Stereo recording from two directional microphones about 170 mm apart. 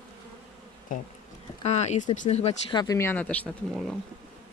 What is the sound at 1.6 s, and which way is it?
Speech, 40° left (ahead or behind).